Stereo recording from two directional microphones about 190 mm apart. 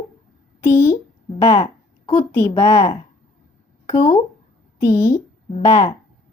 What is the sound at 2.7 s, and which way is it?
Speech, 20° left (ahead or behind).